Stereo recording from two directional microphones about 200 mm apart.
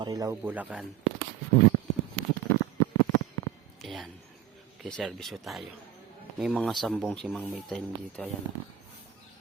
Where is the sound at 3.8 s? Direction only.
Centre (ahead or behind).